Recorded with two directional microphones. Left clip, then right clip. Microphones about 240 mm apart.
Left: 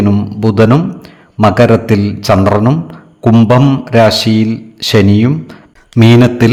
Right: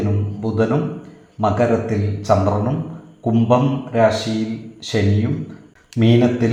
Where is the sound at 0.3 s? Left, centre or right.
Left.